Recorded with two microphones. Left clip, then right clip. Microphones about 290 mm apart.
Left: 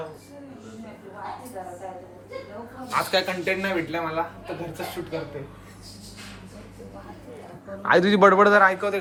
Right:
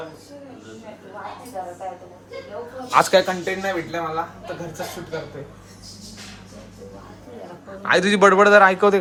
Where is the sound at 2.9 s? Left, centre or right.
Centre.